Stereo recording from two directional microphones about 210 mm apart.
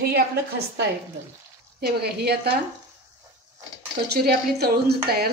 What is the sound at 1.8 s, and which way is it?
Speech, 50° right (ahead or behind).